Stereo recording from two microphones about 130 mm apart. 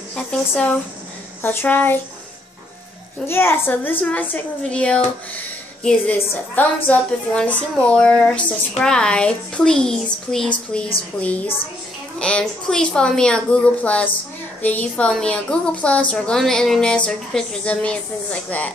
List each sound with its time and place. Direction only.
0.1 s a woman's voice: 10° left (ahead or behind)
3.3 s a woman's voice: 20° left (ahead or behind)